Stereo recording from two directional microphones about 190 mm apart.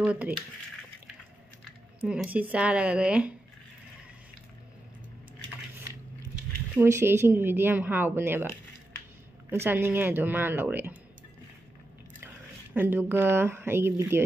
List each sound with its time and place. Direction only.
0.0 s speech: 5° right (ahead or behind)
2.0 s speech: 5° right (ahead or behind)
6.8 s speech: 10° right (ahead or behind)
9.5 s speech: 10° right (ahead or behind)
12.7 s speech: 10° right (ahead or behind)